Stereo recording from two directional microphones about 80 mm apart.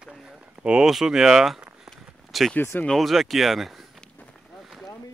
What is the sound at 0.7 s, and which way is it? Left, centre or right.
Speech, centre.